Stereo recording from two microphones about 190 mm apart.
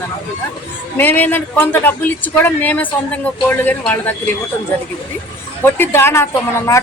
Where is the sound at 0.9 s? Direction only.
10° left (ahead or behind).